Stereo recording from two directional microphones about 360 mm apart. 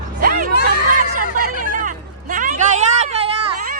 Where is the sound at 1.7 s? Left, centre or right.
Right.